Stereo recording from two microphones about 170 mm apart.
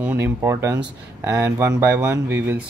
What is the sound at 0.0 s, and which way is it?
Speech, 10° right (ahead or behind).